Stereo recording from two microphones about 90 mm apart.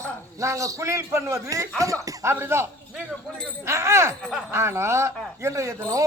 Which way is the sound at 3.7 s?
30° right (ahead or behind).